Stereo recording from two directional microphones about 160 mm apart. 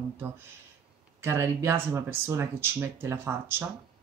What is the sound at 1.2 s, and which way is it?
Speech, 15° right (ahead or behind).